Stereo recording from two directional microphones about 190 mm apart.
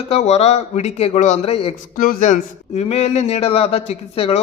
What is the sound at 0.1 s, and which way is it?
Speech, 35° left (ahead or behind).